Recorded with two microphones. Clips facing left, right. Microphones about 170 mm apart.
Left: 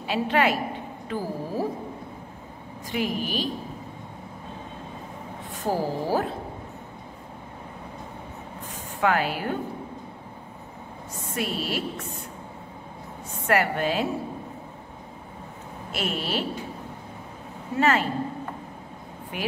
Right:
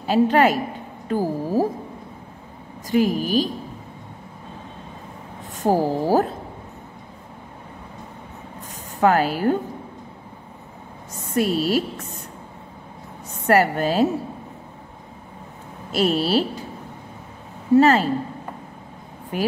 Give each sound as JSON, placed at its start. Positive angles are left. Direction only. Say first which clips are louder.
{"t": 0.0, "sound": "speech", "louder": "right 7 dB", "side_deg": -40}
{"t": 2.9, "sound": "speech", "louder": "right 8 dB", "side_deg": -40}
{"t": 5.6, "sound": "speech", "louder": "right 7 dB", "side_deg": -40}
{"t": 9.0, "sound": "speech", "louder": "right 6 dB", "side_deg": -40}
{"t": 11.3, "sound": "speech", "louder": "right 9 dB", "side_deg": -40}
{"t": 13.5, "sound": "speech", "louder": "right 5 dB", "side_deg": -40}
{"t": 15.9, "sound": "speech", "louder": "right 9 dB", "side_deg": -35}
{"t": 17.7, "sound": "speech", "louder": "right 8 dB", "side_deg": -35}
{"t": 19.3, "sound": "speech", "louder": "right 7 dB", "side_deg": -40}